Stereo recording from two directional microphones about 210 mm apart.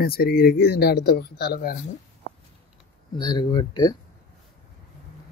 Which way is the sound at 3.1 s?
20° left (ahead or behind).